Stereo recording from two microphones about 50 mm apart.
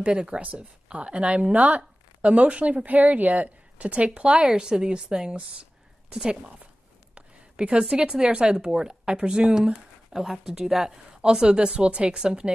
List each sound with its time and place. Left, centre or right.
0.0 s a woman's voice: right
7.2 s a sound: right
7.8 s a woman's voice: centre